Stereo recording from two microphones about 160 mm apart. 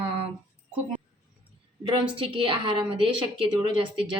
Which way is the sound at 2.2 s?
35° right (ahead or behind).